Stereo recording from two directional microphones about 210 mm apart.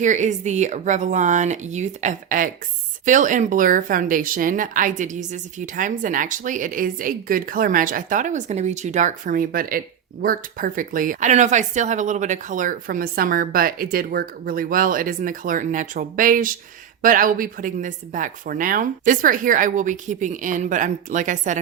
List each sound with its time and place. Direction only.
0.0 s a woman's voice: 35° right (ahead or behind)